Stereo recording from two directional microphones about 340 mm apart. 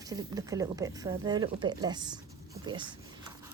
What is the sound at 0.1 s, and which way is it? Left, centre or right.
Speech, centre.